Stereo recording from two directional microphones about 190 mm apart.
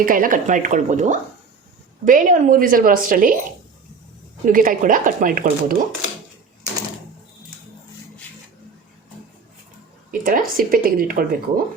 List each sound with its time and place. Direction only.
0.0 s speech: 45° right (ahead or behind)
4.4 s speech: 45° right (ahead or behind)
10.1 s a woman's voice: 45° right (ahead or behind)